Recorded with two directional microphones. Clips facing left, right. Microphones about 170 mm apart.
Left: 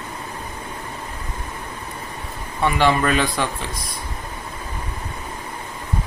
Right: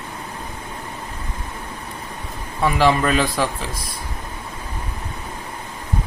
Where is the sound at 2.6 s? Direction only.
Centre (ahead or behind).